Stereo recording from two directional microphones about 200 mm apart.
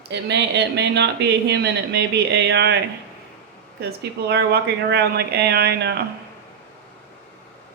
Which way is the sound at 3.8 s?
55° right (ahead or behind).